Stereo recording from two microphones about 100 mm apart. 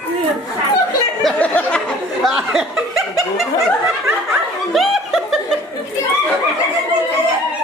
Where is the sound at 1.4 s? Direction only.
15° left (ahead or behind).